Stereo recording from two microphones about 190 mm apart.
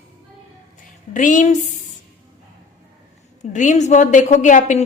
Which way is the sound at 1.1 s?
40° left (ahead or behind).